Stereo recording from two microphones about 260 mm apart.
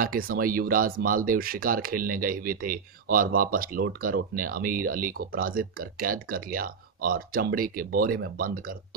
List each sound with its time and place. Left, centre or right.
0.0 s speech: right